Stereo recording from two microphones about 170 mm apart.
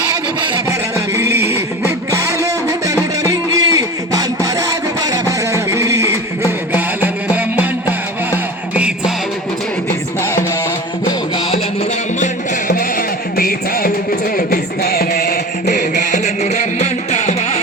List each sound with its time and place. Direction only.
0.7 s a sound: 15° right (ahead or behind)
2.4 s music: 20° right (ahead or behind)
12.2 s music: 55° left (ahead or behind)